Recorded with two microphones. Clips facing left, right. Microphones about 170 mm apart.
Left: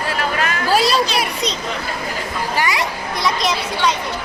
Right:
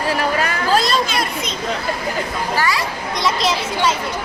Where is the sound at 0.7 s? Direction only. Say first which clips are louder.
Left 1 dB; 10° left (ahead or behind).